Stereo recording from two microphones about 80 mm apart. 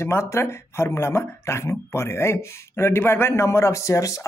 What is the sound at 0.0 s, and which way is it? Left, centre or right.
Speech, left.